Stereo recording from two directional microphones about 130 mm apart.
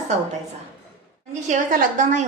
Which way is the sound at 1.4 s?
70° right (ahead or behind).